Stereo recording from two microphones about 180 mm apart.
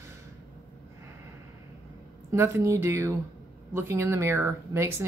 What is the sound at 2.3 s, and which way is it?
A woman's voice, 15° right (ahead or behind).